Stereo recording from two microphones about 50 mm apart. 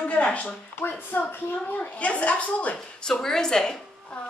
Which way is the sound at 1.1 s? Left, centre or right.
Left.